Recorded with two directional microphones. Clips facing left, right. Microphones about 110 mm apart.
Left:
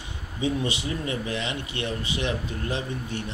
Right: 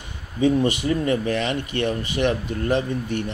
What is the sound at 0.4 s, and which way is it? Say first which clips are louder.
Speech: right 8 dB; 45° right (ahead or behind).